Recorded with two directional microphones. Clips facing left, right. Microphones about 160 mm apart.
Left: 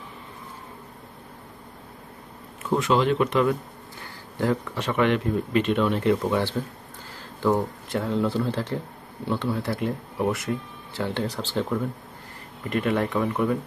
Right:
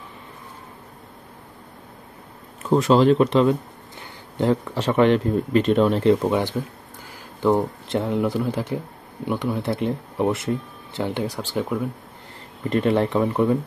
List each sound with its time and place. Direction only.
2.7 s speech: 35° right (ahead or behind)
6.5 s speech: 10° right (ahead or behind)
12.6 s speech: 30° right (ahead or behind)